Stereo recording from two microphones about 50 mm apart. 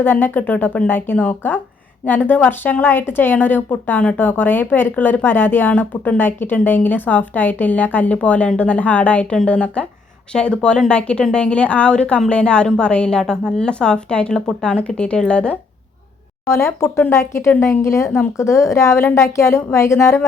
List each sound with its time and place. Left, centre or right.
0.0 s a woman's voice: left
17.1 s speech: left
17.8 s a woman's voice: left